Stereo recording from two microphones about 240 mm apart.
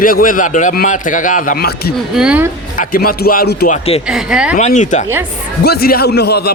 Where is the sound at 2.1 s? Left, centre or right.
Centre.